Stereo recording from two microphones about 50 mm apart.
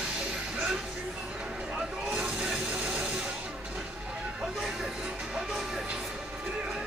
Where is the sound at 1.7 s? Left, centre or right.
Centre.